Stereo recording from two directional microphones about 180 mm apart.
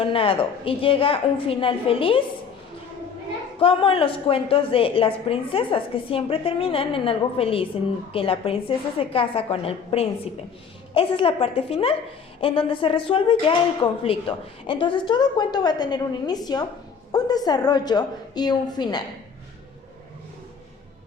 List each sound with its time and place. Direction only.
0.0 s a woman's voice: 30° left (ahead or behind)
3.6 s a woman's voice: 30° left (ahead or behind)